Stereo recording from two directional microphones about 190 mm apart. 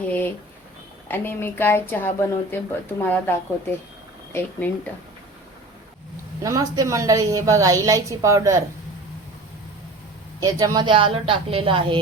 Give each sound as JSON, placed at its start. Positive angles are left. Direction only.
{"t": 0.0, "sound": "a sound", "side_deg": 10}
{"t": 1.0, "sound": "speech", "side_deg": 10}
{"t": 6.4, "sound": "a woman's voice", "side_deg": -20}
{"t": 10.4, "sound": "a woman's voice", "side_deg": -20}